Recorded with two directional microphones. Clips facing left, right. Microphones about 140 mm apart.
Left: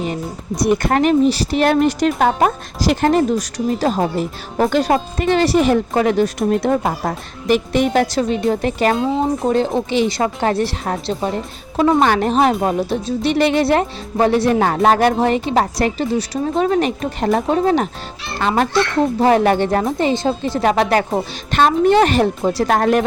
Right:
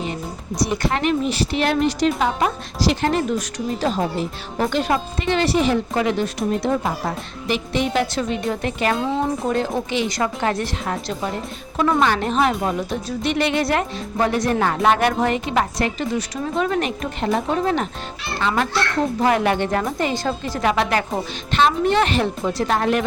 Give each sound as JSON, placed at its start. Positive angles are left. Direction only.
{"t": 0.6, "sound": "speech", "side_deg": 55}
{"t": 9.4, "sound": "speech", "side_deg": 25}
{"t": 20.7, "sound": "speech", "side_deg": 40}